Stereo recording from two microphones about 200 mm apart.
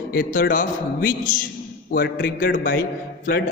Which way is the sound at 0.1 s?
45° left (ahead or behind).